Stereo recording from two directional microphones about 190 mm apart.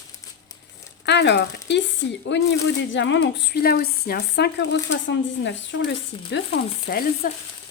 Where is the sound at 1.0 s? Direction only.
65° left (ahead or behind).